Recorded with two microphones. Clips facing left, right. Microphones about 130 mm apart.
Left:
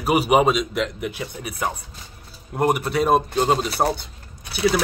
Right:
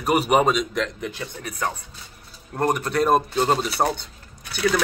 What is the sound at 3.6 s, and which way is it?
Speech, 40° left (ahead or behind).